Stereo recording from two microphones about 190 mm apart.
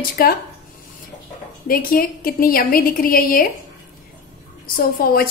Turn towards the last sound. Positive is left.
turn(degrees=50)  # may be behind; listen again after turning